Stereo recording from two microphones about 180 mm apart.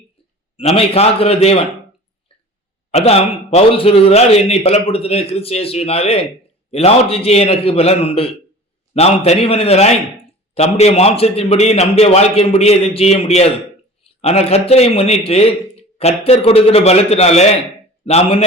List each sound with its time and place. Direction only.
0.5 s a man's voice: 35° left (ahead or behind)
2.9 s a man's voice: 35° left (ahead or behind)